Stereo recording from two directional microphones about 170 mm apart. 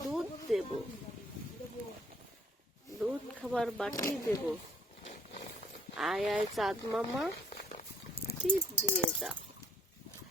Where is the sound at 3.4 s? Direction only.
Centre (ahead or behind).